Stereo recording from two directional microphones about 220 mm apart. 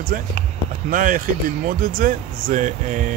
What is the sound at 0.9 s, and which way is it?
Speech, 35° right (ahead or behind).